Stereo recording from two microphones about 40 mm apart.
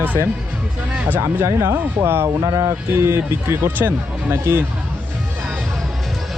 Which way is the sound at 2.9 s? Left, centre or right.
Right.